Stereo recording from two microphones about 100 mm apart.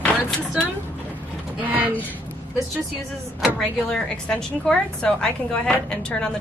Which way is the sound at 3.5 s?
5° left (ahead or behind).